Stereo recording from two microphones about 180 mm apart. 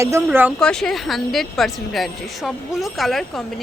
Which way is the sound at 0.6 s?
5° left (ahead or behind).